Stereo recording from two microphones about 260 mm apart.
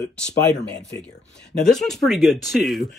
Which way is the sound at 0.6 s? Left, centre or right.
Centre.